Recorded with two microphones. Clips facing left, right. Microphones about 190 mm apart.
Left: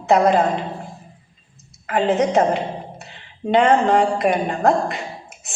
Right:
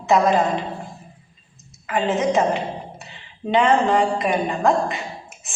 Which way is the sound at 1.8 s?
55° left (ahead or behind).